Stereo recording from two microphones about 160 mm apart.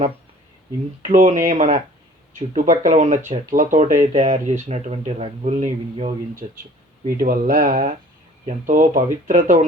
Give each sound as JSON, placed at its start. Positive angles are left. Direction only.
{"t": 1.0, "sound": "speech", "side_deg": -50}
{"t": 7.2, "sound": "speech", "side_deg": -65}
{"t": 8.4, "sound": "speech", "side_deg": -55}